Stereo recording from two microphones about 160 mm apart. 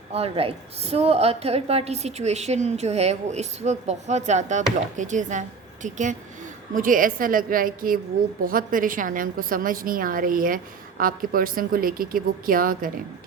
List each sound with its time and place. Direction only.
0.1 s a woman's voice: 35° right (ahead or behind); by 12.9 s 60° right (ahead or behind)